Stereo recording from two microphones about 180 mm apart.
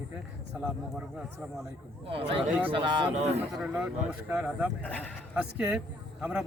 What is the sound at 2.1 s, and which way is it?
A man's voice, 30° right (ahead or behind).